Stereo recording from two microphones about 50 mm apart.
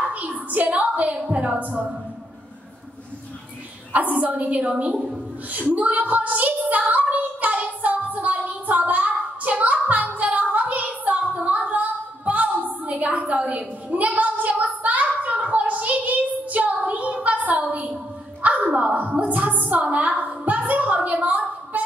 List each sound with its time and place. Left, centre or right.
0.1 s a woman's voice: right
3.9 s a woman's voice: right
5.5 s a sound: right
18.4 s a woman's voice: right